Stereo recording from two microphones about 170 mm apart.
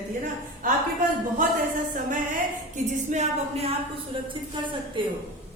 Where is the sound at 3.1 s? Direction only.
45° right (ahead or behind).